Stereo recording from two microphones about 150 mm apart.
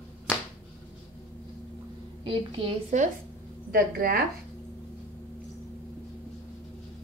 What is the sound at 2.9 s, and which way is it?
Speech, 55° right (ahead or behind).